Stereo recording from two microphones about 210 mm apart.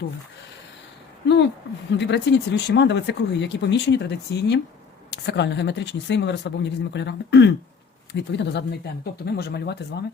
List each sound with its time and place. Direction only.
1.9 s speech: 55° left (ahead or behind)